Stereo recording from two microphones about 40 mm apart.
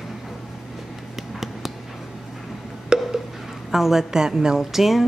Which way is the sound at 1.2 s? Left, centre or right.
Centre.